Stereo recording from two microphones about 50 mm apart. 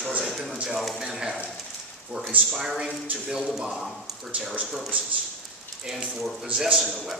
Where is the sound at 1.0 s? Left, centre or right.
Centre.